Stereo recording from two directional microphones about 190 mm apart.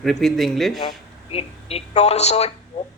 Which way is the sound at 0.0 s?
Centre (ahead or behind).